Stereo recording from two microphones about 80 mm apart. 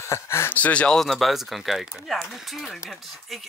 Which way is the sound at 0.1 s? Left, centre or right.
Left.